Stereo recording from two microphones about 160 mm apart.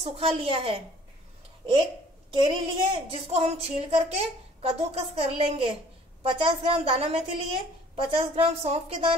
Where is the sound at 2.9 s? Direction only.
40° right (ahead or behind).